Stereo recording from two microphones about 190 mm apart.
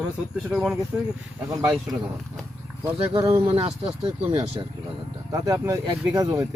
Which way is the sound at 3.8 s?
5° right (ahead or behind).